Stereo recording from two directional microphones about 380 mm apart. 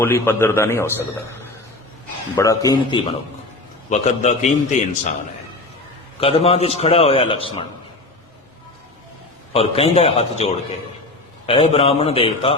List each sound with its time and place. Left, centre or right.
0.0 s a man's voice: centre
2.3 s a man's voice: centre
6.1 s a man's voice: centre
9.5 s a man's voice: centre